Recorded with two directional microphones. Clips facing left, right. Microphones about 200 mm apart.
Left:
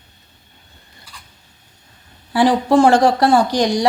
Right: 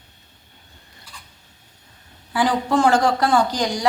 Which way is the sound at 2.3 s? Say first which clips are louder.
Left 6 dB; 35° left (ahead or behind).